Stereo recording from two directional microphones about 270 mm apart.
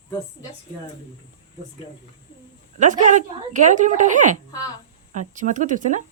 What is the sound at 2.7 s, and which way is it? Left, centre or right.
Speech, right.